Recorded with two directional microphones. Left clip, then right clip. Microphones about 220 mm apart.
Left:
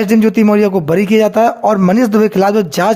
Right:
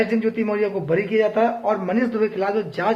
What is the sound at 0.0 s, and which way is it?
A man's voice, 50° left (ahead or behind).